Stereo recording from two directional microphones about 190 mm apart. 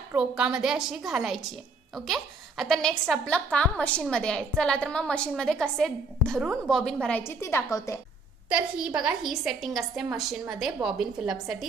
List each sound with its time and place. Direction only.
0.1 s a woman's voice: 5° right (ahead or behind); by 7.9 s 15° left (ahead or behind)
8.4 s a woman's voice: 5° right (ahead or behind)